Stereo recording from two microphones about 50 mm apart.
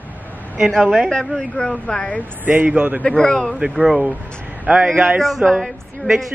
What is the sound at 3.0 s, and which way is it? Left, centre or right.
Speech, centre.